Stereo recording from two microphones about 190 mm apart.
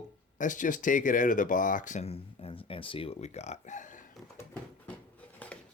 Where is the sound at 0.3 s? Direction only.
40° left (ahead or behind).